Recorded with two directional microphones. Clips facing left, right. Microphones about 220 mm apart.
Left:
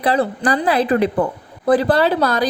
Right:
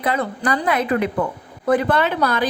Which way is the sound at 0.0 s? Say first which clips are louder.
Left 4 dB; 35° left (ahead or behind).